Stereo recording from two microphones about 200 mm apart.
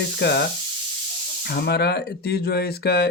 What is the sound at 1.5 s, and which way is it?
Speech, 55° left (ahead or behind).